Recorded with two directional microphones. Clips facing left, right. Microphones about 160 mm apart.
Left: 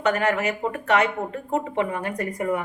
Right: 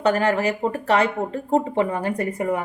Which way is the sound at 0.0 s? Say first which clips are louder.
Right 3 dB; 35° right (ahead or behind).